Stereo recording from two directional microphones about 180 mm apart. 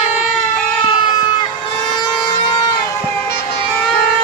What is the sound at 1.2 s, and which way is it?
Crowd, 25° left (ahead or behind).